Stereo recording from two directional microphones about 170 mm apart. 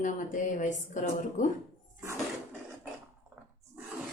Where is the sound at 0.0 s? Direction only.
50° left (ahead or behind).